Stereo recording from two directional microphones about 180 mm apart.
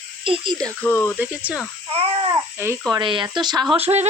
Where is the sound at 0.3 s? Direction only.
25° right (ahead or behind).